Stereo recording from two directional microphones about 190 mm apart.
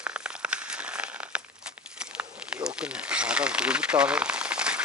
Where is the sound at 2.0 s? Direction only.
5° right (ahead or behind).